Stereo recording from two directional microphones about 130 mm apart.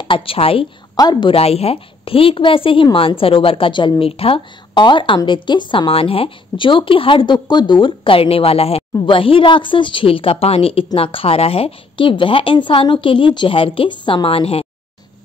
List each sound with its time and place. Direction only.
0.0 s a woman's voice: 40° left (ahead or behind)
0.9 s a woman's voice: 30° left (ahead or behind)
1.3 s a woman's voice: 50° left (ahead or behind)